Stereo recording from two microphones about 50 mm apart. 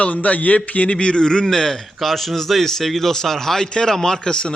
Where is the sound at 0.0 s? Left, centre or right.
Left.